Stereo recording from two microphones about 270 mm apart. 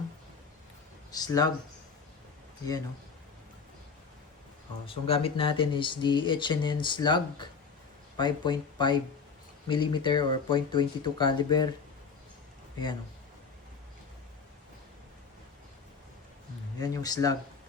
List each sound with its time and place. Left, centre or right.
1.1 s speech: centre
4.9 s speech: left
16.8 s speech: centre